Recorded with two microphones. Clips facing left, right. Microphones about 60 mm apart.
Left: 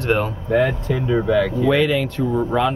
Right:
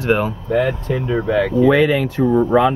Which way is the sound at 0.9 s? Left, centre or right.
Centre.